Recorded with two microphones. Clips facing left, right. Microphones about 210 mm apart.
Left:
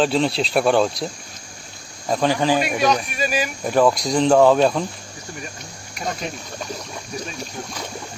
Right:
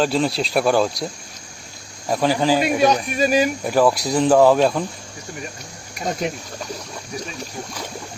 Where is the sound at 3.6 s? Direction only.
5° right (ahead or behind).